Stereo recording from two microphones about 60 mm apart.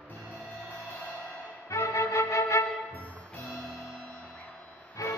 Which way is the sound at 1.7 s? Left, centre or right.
Left.